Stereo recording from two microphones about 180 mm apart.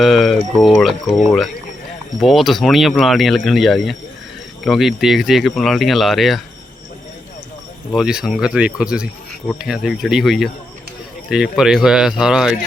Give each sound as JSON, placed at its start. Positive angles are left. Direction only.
{"t": 0.0, "sound": "speech", "side_deg": 0}
{"t": 2.2, "sound": "speech", "side_deg": 0}
{"t": 7.9, "sound": "speech", "side_deg": -5}
{"t": 11.5, "sound": "speech", "side_deg": -5}